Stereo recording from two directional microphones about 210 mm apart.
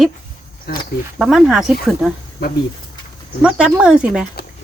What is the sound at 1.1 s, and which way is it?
Speech, centre (ahead or behind).